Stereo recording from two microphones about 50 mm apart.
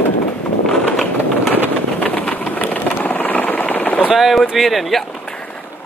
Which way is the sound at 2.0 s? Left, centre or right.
Left.